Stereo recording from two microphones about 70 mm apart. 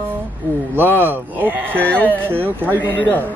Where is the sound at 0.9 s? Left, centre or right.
Right.